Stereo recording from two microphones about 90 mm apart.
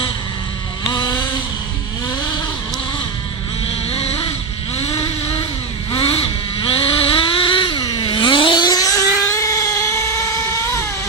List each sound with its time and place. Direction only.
0.9 s vehicle: 55° left (ahead or behind)
5.9 s vehicle: 90° left
8.0 s vehicle: 65° left (ahead or behind)
8.6 s vehicle: 40° left (ahead or behind)
9.3 s cat: 40° left (ahead or behind)